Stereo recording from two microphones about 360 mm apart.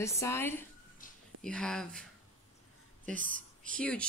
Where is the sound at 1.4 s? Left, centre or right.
Centre.